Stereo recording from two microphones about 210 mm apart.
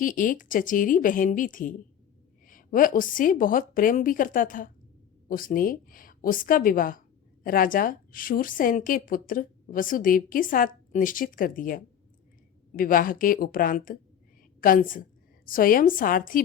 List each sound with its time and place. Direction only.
0.0 s a woman's voice: 40° left (ahead or behind)